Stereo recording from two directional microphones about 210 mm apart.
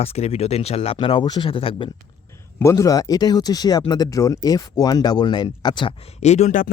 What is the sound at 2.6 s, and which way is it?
Speech, 15° left (ahead or behind).